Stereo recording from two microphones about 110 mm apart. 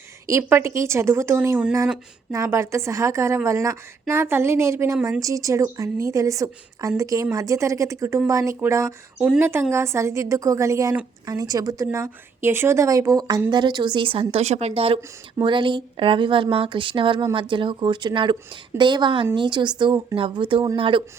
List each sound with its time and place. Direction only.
0.3 s a woman's voice: 25° right (ahead or behind); by 14.9 s 60° right (ahead or behind)
15.4 s speech: 45° right (ahead or behind)